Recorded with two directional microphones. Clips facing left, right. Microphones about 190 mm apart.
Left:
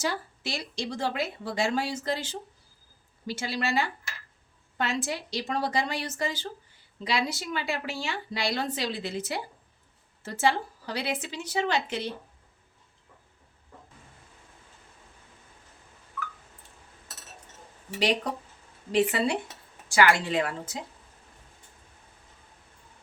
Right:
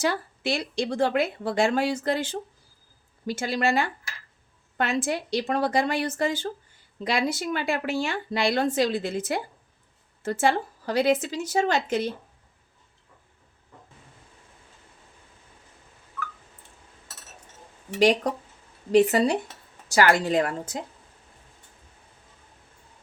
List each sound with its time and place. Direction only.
0.0 s a woman's voice: 60° right (ahead or behind)
18.9 s a woman's voice: 40° right (ahead or behind)